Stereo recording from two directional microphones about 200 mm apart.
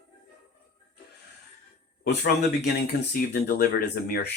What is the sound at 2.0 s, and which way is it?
Speech, 55° left (ahead or behind).